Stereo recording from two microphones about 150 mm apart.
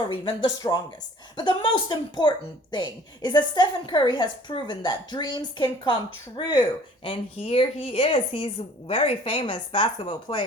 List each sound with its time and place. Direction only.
0.1 s a woman's voice: 30° left (ahead or behind)